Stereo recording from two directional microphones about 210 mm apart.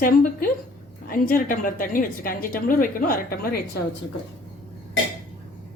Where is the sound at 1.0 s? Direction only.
45° left (ahead or behind).